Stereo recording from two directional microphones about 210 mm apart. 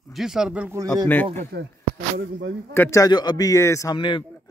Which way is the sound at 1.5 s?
50° right (ahead or behind).